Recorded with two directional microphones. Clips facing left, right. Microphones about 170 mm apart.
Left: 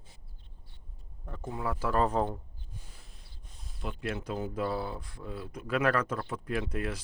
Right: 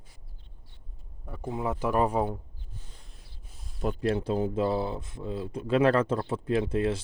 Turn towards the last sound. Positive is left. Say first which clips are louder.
# right 7 dB
turn(degrees=-25)  # may be behind; listen again after turning